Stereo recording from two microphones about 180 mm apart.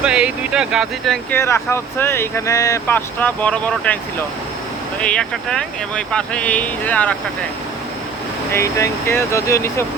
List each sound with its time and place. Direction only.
0.0 s speech: 5° right (ahead or behind)
1.4 s speech: 15° left (ahead or behind)
4.9 s speech: 5° left (ahead or behind)
8.5 s speech: 15° left (ahead or behind)